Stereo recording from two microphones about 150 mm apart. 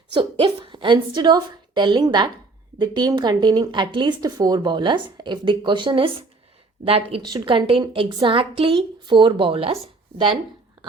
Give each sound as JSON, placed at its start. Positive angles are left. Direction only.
{"t": 0.1, "sound": "a woman's voice", "side_deg": -35}